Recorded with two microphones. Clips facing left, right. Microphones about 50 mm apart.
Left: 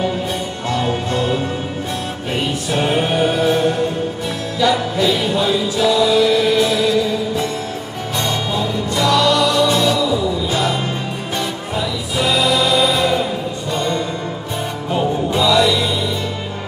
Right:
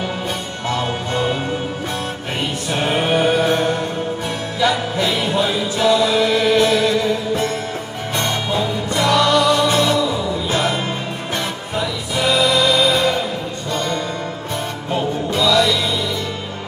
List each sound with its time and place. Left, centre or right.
1.1 s music: centre
2.7 s music: right
3.4 s music: right
4.6 s music: centre
5.9 s chant: right
6.7 s music: right
12.5 s music: centre
15.3 s music: left